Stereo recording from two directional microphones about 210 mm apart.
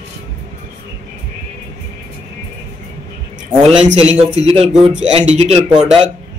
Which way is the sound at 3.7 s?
30° right (ahead or behind).